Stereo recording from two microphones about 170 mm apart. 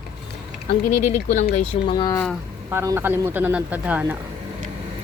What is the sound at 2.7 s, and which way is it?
Speech, 15° right (ahead or behind).